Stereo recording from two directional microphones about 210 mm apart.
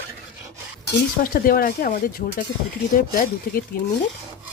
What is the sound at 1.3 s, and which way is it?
Speech, 40° left (ahead or behind).